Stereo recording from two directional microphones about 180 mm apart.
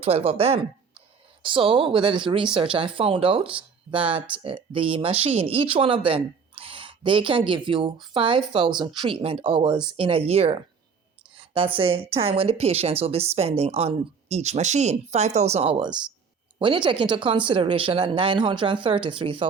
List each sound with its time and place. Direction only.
0.0 s speech: 30° right (ahead or behind)